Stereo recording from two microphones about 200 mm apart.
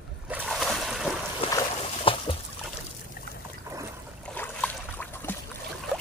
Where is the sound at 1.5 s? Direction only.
20° left (ahead or behind).